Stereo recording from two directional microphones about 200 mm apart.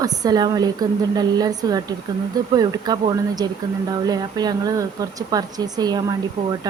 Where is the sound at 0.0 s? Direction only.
20° right (ahead or behind).